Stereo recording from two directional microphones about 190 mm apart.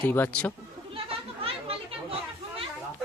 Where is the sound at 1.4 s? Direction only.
30° right (ahead or behind).